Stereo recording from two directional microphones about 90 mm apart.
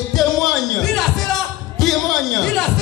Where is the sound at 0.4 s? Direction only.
5° left (ahead or behind).